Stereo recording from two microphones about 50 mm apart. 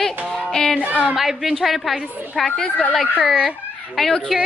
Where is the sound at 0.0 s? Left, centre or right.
Centre.